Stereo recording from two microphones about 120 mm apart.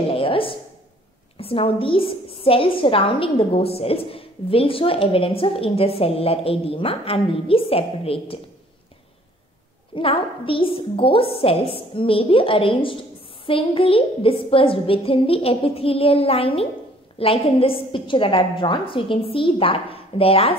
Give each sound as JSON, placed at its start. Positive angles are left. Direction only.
{"t": 0.1, "sound": "a sound", "side_deg": 50}
{"t": 1.4, "sound": "a woman's voice", "side_deg": 50}
{"t": 9.9, "sound": "a woman's voice", "side_deg": 45}